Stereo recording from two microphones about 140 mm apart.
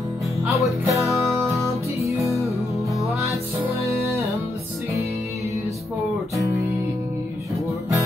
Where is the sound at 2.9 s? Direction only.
Centre (ahead or behind).